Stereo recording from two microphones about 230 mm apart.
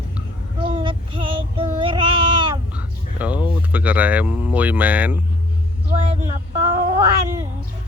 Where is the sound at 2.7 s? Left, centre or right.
Centre.